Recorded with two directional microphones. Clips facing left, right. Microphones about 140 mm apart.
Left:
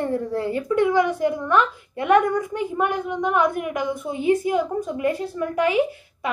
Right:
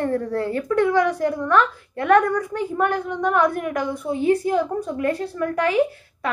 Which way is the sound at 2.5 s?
10° left (ahead or behind).